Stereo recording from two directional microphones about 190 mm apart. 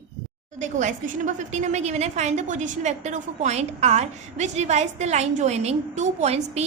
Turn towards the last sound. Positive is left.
turn(degrees=-35)  # may be behind; listen again after turning